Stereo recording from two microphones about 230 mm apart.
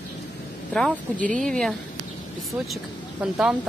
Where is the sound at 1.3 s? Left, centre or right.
Centre.